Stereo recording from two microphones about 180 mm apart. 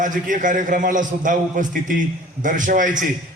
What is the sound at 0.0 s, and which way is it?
A man's voice, 45° right (ahead or behind).